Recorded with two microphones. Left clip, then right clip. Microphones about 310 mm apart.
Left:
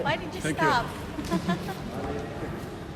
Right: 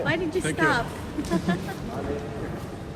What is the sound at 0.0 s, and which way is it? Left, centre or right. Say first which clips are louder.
Speech: right 3 dB; centre.